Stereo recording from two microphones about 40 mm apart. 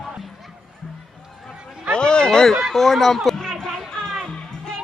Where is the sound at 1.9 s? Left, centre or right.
Left.